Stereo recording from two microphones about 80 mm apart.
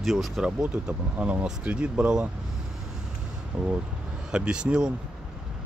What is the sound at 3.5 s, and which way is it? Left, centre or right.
Speech, centre.